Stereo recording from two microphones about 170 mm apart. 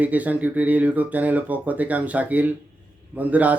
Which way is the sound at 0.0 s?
10° right (ahead or behind).